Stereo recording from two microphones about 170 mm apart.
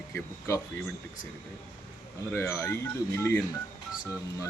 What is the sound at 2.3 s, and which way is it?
A man's voice, 15° left (ahead or behind).